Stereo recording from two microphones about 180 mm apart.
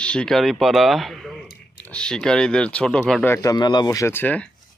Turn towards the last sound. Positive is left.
turn(degrees=10)  # may be behind; listen again after turning